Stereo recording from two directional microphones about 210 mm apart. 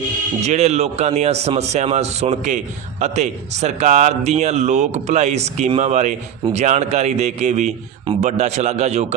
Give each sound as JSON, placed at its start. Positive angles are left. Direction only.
{"t": 0.4, "sound": "a man's voice", "side_deg": -30}